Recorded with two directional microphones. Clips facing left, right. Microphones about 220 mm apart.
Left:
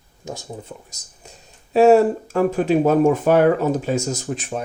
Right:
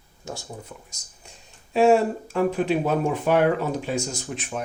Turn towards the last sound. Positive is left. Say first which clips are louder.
# left 4 dB
turn(degrees=30)  # may be behind; listen again after turning